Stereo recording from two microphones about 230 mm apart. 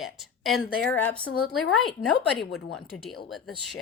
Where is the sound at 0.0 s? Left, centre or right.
Centre.